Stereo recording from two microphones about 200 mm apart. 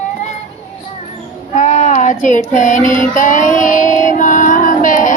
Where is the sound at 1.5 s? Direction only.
40° left (ahead or behind).